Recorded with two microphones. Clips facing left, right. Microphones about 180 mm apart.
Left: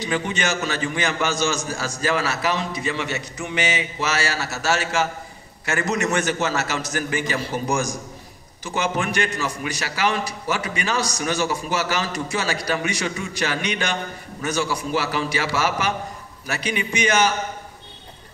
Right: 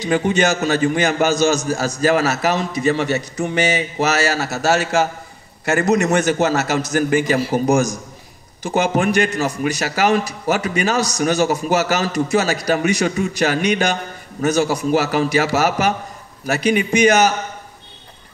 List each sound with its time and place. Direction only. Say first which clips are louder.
0.0 s a man's voice: right 7 dB; 40° right (ahead or behind)
8.6 s a man's voice: right 7 dB; 40° right (ahead or behind)